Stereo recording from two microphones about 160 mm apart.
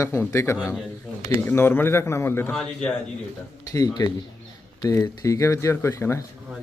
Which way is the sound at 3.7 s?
25° left (ahead or behind).